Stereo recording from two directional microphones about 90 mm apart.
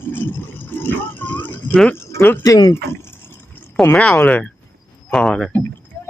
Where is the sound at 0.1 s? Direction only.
25° left (ahead or behind).